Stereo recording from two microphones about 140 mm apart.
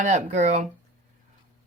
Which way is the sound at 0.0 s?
60° right (ahead or behind).